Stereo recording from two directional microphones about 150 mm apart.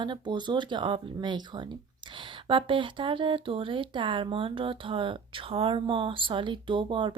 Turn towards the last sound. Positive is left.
turn(degrees=-30)  # may be behind; listen again after turning